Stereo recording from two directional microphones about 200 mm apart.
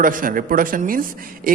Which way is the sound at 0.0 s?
45° right (ahead or behind).